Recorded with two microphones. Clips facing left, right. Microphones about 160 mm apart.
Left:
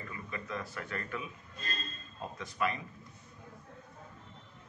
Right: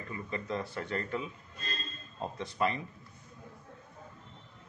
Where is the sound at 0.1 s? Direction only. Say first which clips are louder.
Right 6 dB; 30° right (ahead or behind).